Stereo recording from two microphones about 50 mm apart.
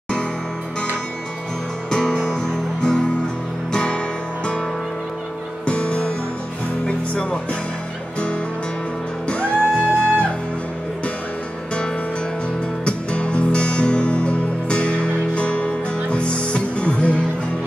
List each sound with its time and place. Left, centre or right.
1.9 s music: centre
5.7 s music: left
9.3 s music: left
12.8 s music: left